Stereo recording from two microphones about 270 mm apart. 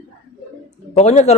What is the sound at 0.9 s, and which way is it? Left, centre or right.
Speech, left.